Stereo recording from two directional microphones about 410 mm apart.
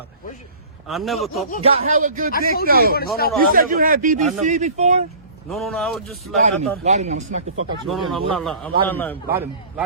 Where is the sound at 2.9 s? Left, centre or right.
Left.